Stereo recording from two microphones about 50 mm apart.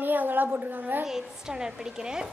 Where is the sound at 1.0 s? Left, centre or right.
Centre.